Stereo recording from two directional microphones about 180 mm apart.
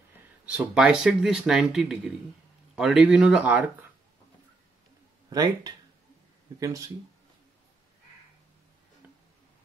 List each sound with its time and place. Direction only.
0.5 s speech: 5° right (ahead or behind)
5.3 s speech: 20° right (ahead or behind)